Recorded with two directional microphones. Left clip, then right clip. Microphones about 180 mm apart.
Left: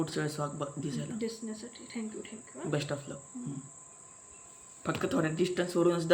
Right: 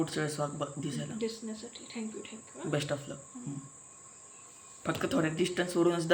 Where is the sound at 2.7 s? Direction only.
5° right (ahead or behind).